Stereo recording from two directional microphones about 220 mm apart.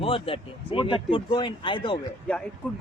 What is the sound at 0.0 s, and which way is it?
Speech, 25° left (ahead or behind).